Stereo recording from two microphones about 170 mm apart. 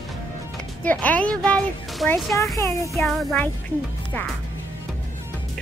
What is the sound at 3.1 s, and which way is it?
Music, centre (ahead or behind).